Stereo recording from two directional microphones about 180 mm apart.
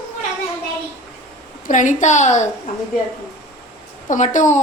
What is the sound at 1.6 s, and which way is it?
Speech, 45° left (ahead or behind).